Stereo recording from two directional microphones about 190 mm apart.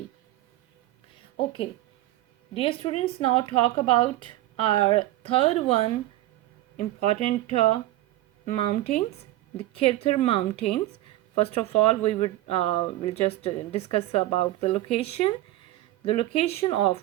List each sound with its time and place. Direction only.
2.5 s a woman's voice: 30° left (ahead or behind)